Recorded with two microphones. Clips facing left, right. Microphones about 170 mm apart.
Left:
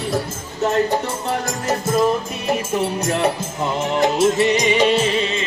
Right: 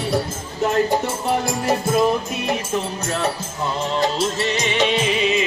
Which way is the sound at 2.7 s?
15° left (ahead or behind).